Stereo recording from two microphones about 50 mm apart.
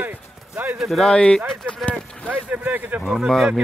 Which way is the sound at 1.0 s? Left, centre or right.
Centre.